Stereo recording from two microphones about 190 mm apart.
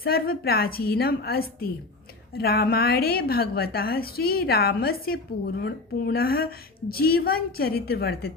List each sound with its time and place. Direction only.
0.0 s a woman's voice: 55° left (ahead or behind)